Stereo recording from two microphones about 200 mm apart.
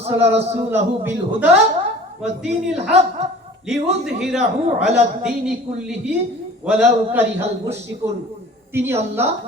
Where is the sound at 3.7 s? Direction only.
Centre (ahead or behind).